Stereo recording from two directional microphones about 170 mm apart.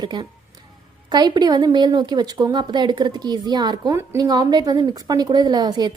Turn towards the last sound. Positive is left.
turn(degrees=-25)  # may be behind; listen again after turning